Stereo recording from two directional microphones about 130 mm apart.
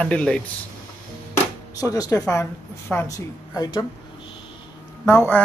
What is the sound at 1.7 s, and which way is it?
Speech, 30° left (ahead or behind).